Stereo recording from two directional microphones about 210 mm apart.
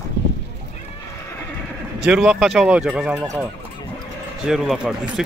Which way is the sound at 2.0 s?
5° right (ahead or behind).